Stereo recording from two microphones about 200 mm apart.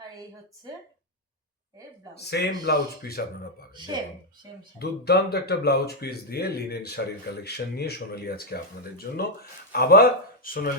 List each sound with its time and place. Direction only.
2.1 s speech: 55° left (ahead or behind)
3.8 s speech: 25° right (ahead or behind)
4.8 s speech: 55° left (ahead or behind)